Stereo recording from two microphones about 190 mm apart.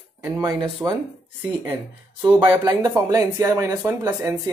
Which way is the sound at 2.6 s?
20° right (ahead or behind).